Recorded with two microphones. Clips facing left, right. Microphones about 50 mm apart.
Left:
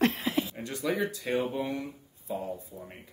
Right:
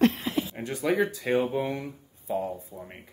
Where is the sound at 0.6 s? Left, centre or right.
Right.